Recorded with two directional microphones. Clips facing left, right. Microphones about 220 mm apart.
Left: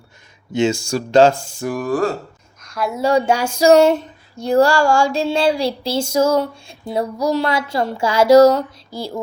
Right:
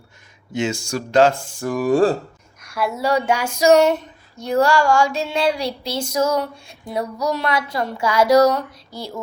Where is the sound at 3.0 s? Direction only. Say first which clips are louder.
Left 4 dB; 30° left (ahead or behind).